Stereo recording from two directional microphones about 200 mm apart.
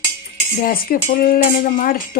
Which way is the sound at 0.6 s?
45° left (ahead or behind).